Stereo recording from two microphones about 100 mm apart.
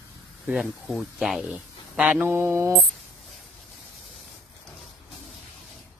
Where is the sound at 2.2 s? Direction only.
25° right (ahead or behind).